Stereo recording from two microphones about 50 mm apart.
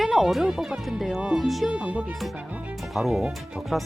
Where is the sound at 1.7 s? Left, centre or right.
Right.